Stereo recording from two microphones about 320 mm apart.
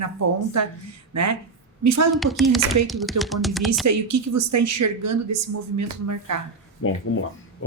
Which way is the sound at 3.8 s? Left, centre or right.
Right.